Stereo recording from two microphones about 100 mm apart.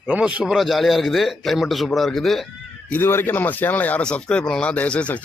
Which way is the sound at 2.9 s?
20° left (ahead or behind).